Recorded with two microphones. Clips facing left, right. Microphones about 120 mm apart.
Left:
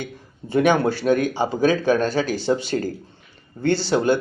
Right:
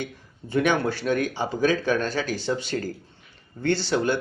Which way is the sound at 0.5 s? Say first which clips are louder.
Left 5 dB; 35° left (ahead or behind).